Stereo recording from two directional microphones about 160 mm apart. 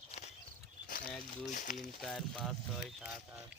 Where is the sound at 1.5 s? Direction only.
55° left (ahead or behind).